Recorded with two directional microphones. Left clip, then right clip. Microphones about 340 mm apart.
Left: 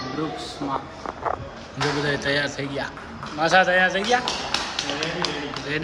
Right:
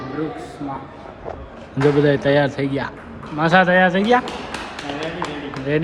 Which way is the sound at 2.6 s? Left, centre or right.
Centre.